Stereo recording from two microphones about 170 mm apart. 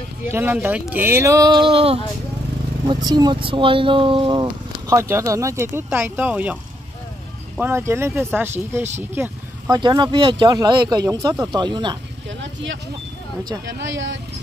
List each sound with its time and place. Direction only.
0.3 s speech: 10° right (ahead or behind)
9.1 s vehicle: 15° right (ahead or behind)
9.8 s speech: 25° right (ahead or behind)
12.3 s vehicle: 90° right
13.8 s speech: 90° right